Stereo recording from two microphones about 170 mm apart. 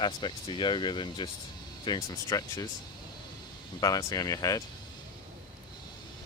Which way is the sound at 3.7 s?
20° left (ahead or behind).